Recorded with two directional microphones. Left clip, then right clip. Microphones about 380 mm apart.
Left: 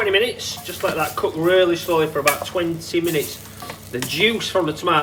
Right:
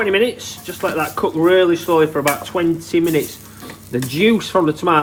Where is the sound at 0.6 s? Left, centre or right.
Centre.